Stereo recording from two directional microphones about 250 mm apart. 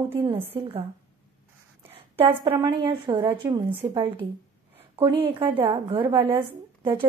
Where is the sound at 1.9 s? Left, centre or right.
Right.